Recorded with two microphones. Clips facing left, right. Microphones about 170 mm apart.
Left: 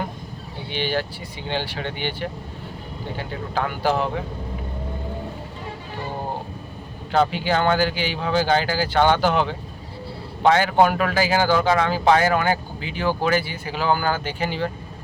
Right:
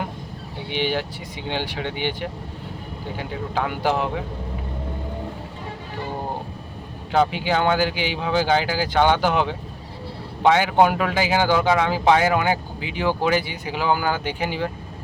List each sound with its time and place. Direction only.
0.7 s speech: 15° right (ahead or behind)
3.2 s speech: 15° right (ahead or behind)
7.1 s speech: 15° right (ahead or behind)